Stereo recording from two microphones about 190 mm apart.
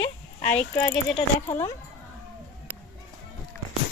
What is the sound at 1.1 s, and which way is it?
Speech, 35° left (ahead or behind).